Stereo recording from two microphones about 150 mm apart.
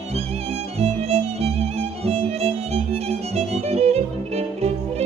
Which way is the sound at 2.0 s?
45° right (ahead or behind).